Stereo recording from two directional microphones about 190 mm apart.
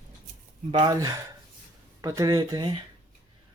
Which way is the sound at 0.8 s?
20° right (ahead or behind).